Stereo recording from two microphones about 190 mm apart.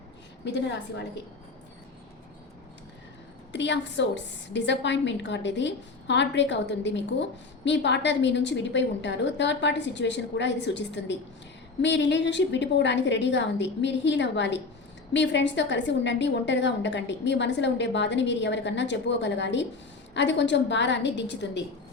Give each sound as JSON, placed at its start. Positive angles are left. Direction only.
{"t": 0.4, "sound": "a woman's voice", "side_deg": 70}
{"t": 3.5, "sound": "a woman's voice", "side_deg": 70}